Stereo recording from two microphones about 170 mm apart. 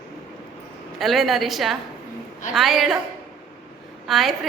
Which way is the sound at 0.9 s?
Centre (ahead or behind).